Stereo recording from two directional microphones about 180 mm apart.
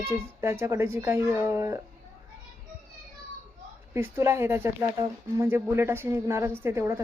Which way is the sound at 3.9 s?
15° right (ahead or behind).